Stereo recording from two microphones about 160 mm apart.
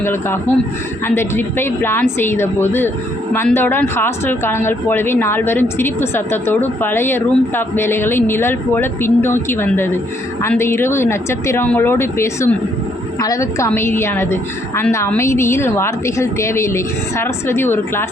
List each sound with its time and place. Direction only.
0.0 s speech: 15° left (ahead or behind)